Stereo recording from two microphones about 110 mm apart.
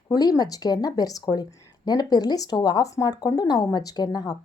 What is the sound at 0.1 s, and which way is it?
A woman's voice, 35° left (ahead or behind).